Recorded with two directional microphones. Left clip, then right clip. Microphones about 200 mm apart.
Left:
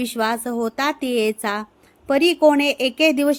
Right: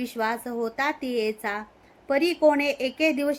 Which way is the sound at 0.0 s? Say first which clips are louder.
Left 6 dB; 55° left (ahead or behind).